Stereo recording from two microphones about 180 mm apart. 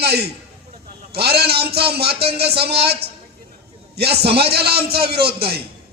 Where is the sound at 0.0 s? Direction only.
65° right (ahead or behind).